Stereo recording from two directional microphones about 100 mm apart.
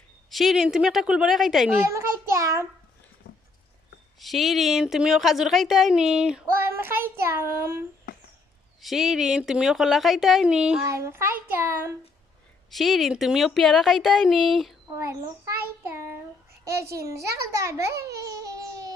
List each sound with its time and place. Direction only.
0.3 s a woman's voice: centre (ahead or behind)
1.9 s a child's voice: 30° right (ahead or behind)
4.2 s a woman's voice: centre (ahead or behind)
6.7 s child singing: 20° right (ahead or behind)
8.8 s a woman's voice: centre (ahead or behind)
10.8 s child singing: 25° right (ahead or behind)
12.7 s a woman's voice: centre (ahead or behind)
15.4 s child singing: 25° right (ahead or behind)
16.6 s a child's voice: 30° right (ahead or behind)